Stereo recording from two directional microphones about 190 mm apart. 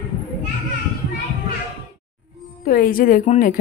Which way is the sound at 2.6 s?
45° left (ahead or behind).